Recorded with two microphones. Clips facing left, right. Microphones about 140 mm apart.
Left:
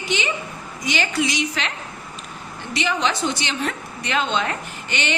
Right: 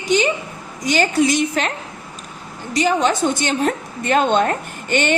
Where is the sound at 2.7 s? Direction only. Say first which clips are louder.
Right 6 dB; 45° right (ahead or behind).